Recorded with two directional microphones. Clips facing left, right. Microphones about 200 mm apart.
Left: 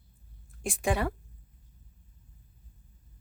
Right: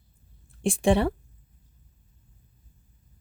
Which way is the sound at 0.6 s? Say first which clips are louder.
Right 7 dB; 30° right (ahead or behind).